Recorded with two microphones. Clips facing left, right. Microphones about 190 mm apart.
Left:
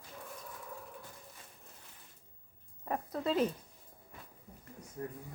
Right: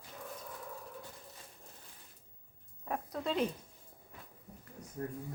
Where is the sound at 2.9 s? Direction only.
5° left (ahead or behind).